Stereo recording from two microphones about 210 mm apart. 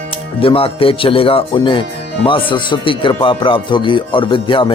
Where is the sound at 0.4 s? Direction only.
25° left (ahead or behind).